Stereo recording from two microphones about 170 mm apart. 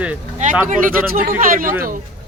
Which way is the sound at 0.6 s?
50° right (ahead or behind).